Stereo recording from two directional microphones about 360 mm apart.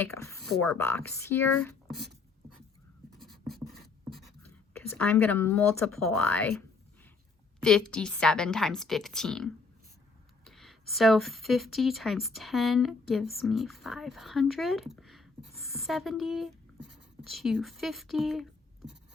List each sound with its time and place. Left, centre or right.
0.0 s speech: centre
1.9 s a sound: right
3.1 s writing: centre
4.9 s speech: centre
7.6 s speech: centre